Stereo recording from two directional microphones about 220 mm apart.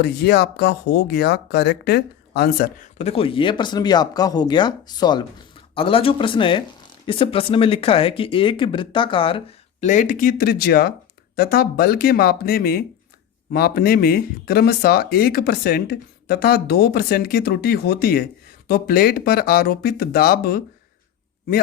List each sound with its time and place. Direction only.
0.0 s speech: 50° left (ahead or behind)
3.0 s speech: 25° left (ahead or behind); by 20.6 s 45° left (ahead or behind)